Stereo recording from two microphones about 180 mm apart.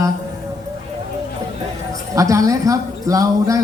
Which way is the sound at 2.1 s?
20° right (ahead or behind).